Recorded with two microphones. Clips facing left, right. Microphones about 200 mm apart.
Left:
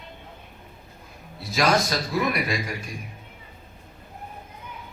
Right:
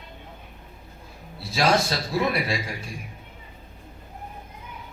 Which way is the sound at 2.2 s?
30° right (ahead or behind).